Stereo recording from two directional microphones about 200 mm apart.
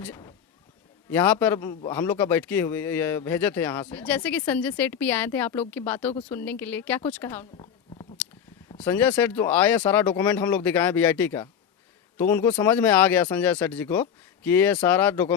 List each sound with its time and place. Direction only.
1.1 s speech: 10° left (ahead or behind)
1.5 s a man's voice: 20° left (ahead or behind)
1.9 s speech: 10° left (ahead or behind)
7.5 s a sound: 25° left (ahead or behind)
8.8 s speech: 10° left (ahead or behind)